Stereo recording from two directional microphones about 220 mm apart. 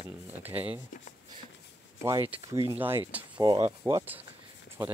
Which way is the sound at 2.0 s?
10° right (ahead or behind).